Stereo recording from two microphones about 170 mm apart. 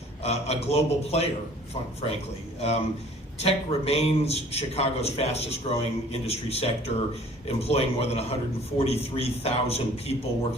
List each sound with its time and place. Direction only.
0.2 s a man's voice: 40° left (ahead or behind)
2.6 s a man's voice: 40° left (ahead or behind)